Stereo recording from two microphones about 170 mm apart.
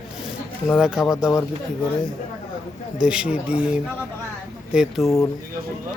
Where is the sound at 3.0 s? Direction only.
5° right (ahead or behind).